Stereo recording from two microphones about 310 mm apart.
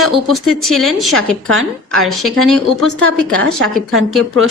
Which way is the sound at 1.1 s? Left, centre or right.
Right.